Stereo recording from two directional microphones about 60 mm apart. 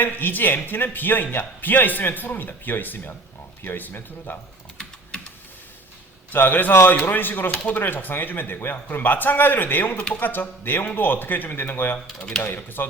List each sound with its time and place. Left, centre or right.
0.0 s a man's voice: left
6.3 s a man's voice: left